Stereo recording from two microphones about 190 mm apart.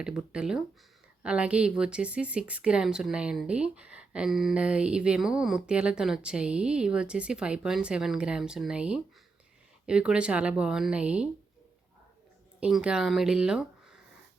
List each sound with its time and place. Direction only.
0.0 s a woman's voice: 5° right (ahead or behind)
12.5 s speech: 5° right (ahead or behind)